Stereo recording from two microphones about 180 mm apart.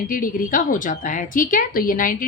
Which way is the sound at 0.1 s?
50° left (ahead or behind).